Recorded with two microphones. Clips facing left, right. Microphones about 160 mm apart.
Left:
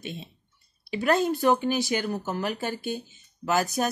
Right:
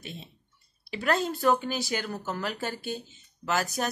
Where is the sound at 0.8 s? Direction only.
20° left (ahead or behind).